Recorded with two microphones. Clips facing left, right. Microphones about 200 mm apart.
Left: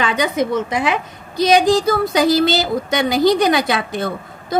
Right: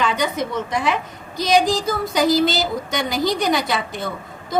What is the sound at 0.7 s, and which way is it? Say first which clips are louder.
Speech: left 2 dB; 80° left.